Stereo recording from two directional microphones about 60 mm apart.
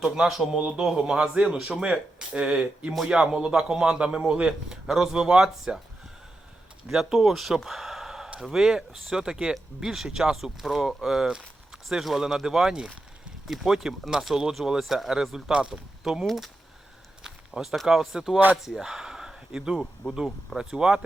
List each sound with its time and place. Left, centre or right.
0.0 s speech: centre
6.9 s speech: centre